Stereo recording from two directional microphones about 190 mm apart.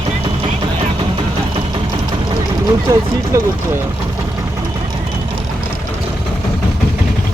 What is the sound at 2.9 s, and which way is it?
Speech, 15° right (ahead or behind).